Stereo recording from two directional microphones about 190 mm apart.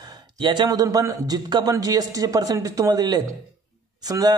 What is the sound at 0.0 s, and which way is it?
A man's voice, 25° right (ahead or behind).